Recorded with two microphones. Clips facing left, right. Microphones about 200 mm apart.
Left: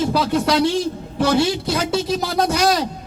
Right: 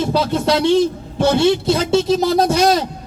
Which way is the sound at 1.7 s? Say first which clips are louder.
Right 5 dB; 25° right (ahead or behind).